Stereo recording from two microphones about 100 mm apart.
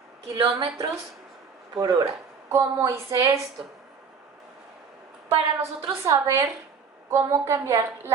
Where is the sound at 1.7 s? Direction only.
40° right (ahead or behind).